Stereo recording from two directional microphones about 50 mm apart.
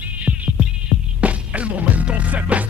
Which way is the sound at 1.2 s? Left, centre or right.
Right.